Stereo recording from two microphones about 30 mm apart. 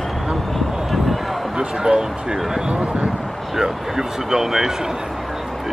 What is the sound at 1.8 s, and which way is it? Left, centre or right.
Speech, right.